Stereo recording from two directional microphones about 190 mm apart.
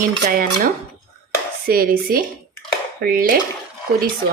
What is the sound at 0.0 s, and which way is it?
Speech, 45° right (ahead or behind).